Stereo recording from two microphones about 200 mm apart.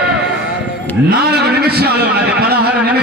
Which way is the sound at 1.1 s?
55° right (ahead or behind).